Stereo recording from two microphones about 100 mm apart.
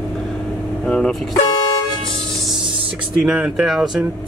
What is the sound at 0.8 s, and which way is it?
Speech, 5° left (ahead or behind).